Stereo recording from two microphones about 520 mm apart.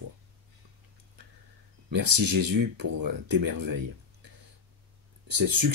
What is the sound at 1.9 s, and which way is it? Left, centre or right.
Speech, right.